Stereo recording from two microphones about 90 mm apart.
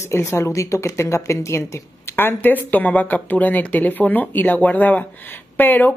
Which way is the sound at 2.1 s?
20° left (ahead or behind).